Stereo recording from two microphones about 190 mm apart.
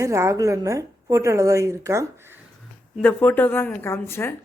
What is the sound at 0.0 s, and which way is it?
A woman's voice, 15° right (ahead or behind).